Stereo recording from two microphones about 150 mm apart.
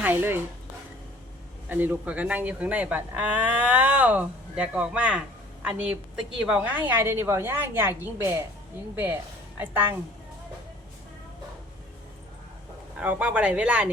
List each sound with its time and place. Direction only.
0.0 s speech: 15° right (ahead or behind)
1.7 s speech: 10° right (ahead or behind)
9.6 s speech: 15° right (ahead or behind)
13.0 s speech: 10° right (ahead or behind)